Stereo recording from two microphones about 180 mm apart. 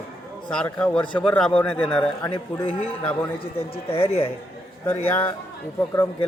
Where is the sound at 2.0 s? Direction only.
25° left (ahead or behind).